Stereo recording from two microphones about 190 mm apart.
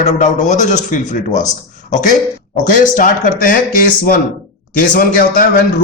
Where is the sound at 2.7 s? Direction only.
45° left (ahead or behind).